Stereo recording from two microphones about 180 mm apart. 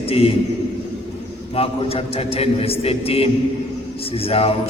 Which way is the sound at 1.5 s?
35° left (ahead or behind).